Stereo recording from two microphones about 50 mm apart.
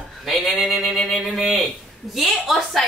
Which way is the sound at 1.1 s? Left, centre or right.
Centre.